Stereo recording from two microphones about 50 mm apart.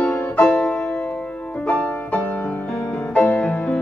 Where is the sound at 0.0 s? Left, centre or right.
Left.